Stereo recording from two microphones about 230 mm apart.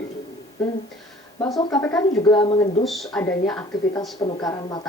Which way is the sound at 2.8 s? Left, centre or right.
Centre.